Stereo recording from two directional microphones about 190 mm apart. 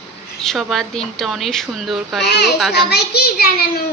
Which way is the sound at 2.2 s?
60° left (ahead or behind).